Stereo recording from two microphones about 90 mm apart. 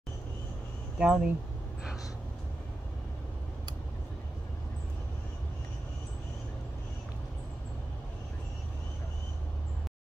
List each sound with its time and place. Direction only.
0.9 s speech: 10° right (ahead or behind)